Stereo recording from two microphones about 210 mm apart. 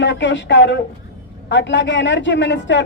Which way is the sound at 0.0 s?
60° left (ahead or behind).